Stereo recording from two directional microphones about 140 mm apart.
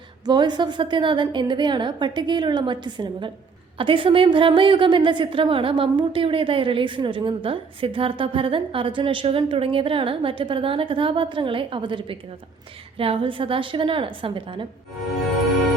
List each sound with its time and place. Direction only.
0.3 s a woman's voice: 30° right (ahead or behind)